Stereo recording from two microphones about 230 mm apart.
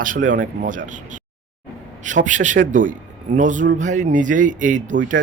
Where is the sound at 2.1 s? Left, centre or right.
Right.